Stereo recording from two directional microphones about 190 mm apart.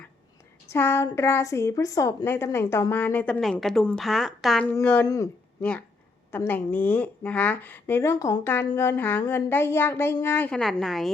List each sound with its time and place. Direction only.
0.7 s a woman's voice: 15° left (ahead or behind)
6.3 s a woman's voice: 10° left (ahead or behind)